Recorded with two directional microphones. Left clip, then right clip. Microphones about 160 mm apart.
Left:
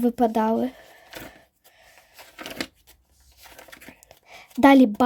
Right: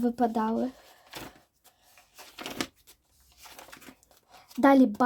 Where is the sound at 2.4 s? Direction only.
10° right (ahead or behind).